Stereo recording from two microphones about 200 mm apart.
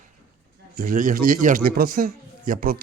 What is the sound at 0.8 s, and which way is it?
A man's voice, 40° right (ahead or behind).